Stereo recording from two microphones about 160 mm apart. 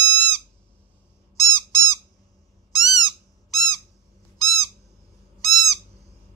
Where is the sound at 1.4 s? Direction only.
25° left (ahead or behind).